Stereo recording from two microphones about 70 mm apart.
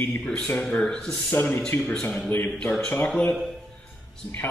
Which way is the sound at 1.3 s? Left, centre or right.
Left.